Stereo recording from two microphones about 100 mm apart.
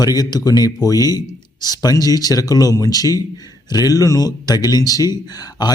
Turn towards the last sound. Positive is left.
turn(degrees=40)  # may be behind; listen again after turning